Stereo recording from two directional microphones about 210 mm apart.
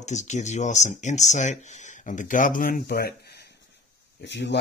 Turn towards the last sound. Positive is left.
turn(degrees=55)  # may be behind; listen again after turning